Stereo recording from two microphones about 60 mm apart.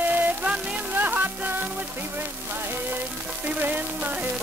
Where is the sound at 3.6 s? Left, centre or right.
Right.